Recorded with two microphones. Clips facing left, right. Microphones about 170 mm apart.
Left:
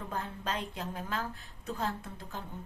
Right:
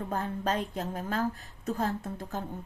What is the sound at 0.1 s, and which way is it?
Speech, 45° right (ahead or behind).